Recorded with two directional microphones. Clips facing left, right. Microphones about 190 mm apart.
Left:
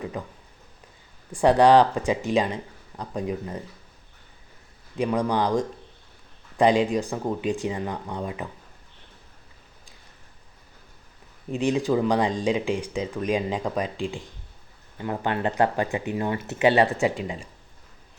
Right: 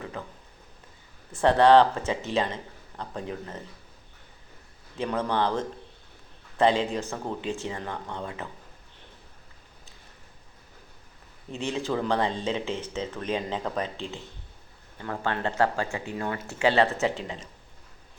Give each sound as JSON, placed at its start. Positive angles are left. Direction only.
{"t": 0.1, "sound": "speech", "side_deg": 15}
{"t": 4.9, "sound": "speech", "side_deg": 15}
{"t": 11.5, "sound": "speech", "side_deg": 15}